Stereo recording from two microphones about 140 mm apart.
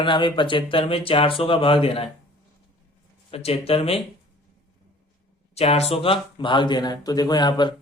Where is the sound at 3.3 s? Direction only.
45° left (ahead or behind).